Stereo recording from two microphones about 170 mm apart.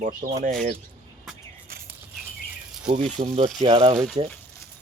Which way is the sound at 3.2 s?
35° right (ahead or behind).